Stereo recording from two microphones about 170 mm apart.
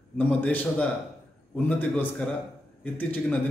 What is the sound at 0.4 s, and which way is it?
A man's voice, 10° left (ahead or behind).